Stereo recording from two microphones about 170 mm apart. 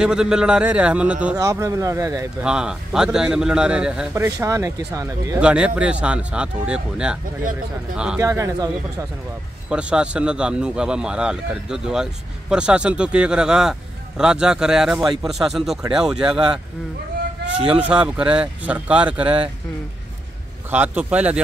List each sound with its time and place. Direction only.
0.0 s a man's voice: 5° right (ahead or behind)
1.3 s speech: 20° right (ahead or behind)
2.4 s a man's voice: 5° right (ahead or behind)
4.1 s speech: 15° right (ahead or behind)
5.4 s a man's voice: 5° right (ahead or behind)
8.2 s speech: 20° right (ahead or behind)
9.7 s a man's voice: 5° right (ahead or behind)
17.6 s speech: 5° right (ahead or behind)
20.7 s speech: 10° right (ahead or behind)